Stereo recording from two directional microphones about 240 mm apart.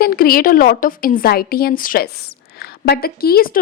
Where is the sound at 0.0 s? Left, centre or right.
Left.